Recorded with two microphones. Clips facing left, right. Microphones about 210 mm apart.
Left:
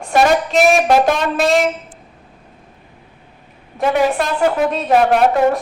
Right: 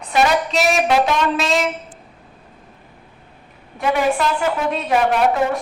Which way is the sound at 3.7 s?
45° left (ahead or behind).